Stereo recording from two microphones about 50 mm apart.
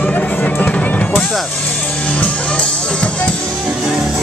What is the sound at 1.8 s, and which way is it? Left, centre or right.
Music, left.